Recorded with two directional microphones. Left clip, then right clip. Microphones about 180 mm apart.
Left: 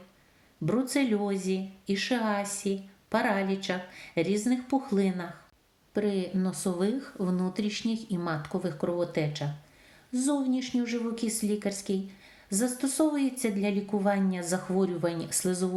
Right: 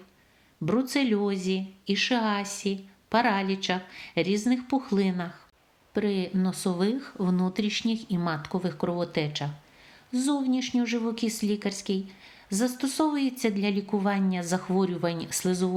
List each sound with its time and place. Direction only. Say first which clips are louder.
0.6 s speech: right 2 dB; 35° right (ahead or behind)